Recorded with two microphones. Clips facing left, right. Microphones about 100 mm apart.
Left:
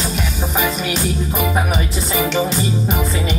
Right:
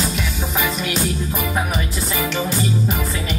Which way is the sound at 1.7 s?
20° left (ahead or behind).